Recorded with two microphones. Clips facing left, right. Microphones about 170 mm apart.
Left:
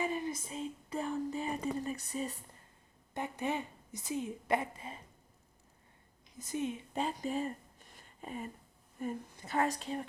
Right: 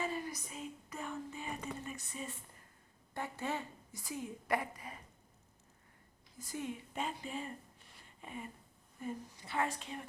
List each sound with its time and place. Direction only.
0.0 s a sound: 20° left (ahead or behind); by 2.4 s 35° left (ahead or behind)
3.2 s a woman's voice: 20° left (ahead or behind)
6.4 s a woman's voice: 20° left (ahead or behind)
6.9 s speech: 35° left (ahead or behind)
9.0 s a woman's voice: 50° left (ahead or behind)